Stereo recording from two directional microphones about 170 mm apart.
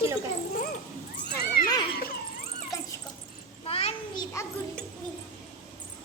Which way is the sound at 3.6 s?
35° left (ahead or behind).